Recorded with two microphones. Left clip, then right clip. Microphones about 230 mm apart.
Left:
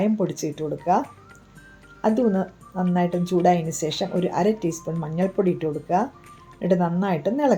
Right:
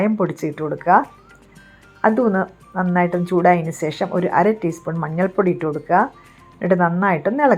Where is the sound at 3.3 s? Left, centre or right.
Right.